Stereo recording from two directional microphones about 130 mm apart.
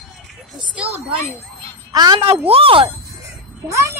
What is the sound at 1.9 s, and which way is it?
Speech, 30° right (ahead or behind).